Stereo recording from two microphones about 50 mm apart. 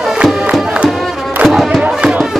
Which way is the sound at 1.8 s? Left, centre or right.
Centre.